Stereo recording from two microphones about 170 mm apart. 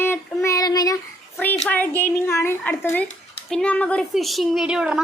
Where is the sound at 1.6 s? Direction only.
10° left (ahead or behind).